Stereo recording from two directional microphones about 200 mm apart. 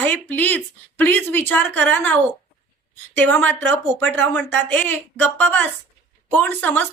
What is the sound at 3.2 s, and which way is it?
A woman's voice, 10° left (ahead or behind).